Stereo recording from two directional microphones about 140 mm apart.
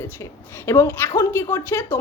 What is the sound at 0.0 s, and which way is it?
A woman's voice, 15° left (ahead or behind).